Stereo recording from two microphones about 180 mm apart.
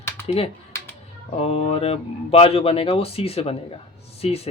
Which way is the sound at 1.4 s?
35° left (ahead or behind).